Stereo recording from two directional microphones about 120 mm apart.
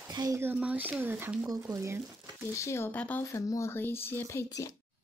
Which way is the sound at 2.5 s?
25° left (ahead or behind).